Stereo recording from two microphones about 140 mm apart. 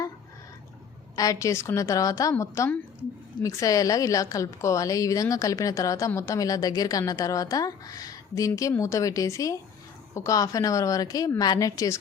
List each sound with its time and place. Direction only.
1.1 s a woman's voice: 25° left (ahead or behind)